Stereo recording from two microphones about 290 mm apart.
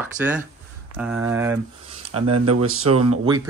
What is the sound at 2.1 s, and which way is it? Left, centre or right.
Speech, right.